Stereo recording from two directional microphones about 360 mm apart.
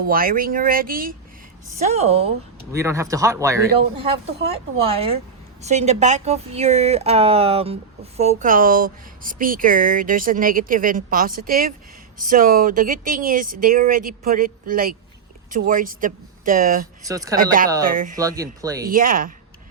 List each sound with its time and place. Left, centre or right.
0.0 s speech: right
17.1 s speech: centre
17.8 s speech: right
18.2 s speech: centre
18.9 s speech: right